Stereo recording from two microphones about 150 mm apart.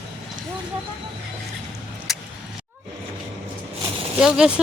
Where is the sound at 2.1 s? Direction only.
Centre (ahead or behind).